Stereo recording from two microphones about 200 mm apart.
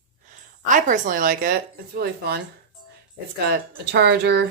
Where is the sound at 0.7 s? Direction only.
40° right (ahead or behind).